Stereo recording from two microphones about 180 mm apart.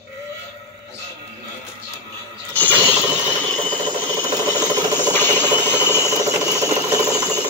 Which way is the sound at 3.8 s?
25° right (ahead or behind).